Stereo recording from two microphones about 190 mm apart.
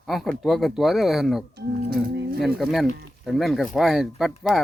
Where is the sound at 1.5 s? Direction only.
55° right (ahead or behind).